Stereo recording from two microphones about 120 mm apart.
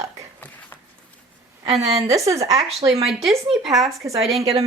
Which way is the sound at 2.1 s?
25° right (ahead or behind).